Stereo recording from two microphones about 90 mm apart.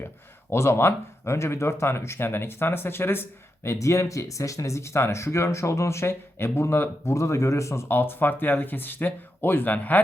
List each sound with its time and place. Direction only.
0.5 s speech: 30° left (ahead or behind)